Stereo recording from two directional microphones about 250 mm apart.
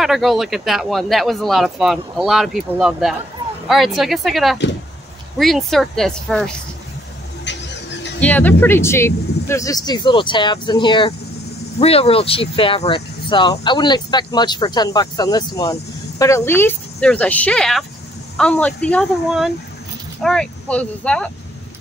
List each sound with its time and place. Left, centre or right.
0.0 s speech: centre
8.2 s speech: centre